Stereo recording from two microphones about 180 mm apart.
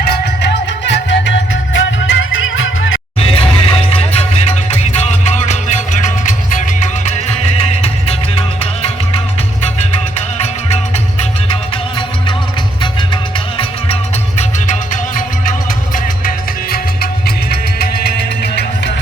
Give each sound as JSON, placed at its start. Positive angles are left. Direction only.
{"t": 0.0, "sound": "music", "side_deg": 65}
{"t": 1.7, "sound": "music", "side_deg": 90}
{"t": 3.2, "sound": "music", "side_deg": 30}
{"t": 13.6, "sound": "music", "side_deg": 35}
{"t": 16.2, "sound": "music", "side_deg": 55}